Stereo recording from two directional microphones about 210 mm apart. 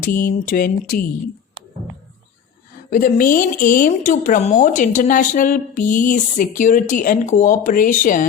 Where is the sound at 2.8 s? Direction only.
40° left (ahead or behind).